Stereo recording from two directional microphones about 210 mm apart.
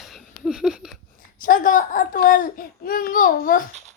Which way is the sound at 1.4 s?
40° left (ahead or behind).